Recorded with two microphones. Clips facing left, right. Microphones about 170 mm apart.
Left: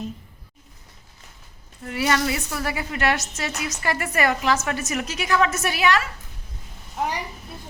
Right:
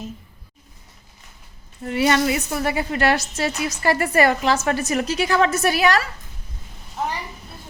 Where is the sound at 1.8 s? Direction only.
25° right (ahead or behind).